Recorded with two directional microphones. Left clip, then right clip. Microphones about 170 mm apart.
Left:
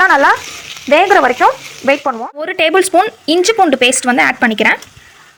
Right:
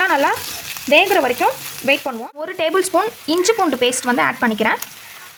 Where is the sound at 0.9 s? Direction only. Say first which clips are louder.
Left 5 dB; 5° right (ahead or behind).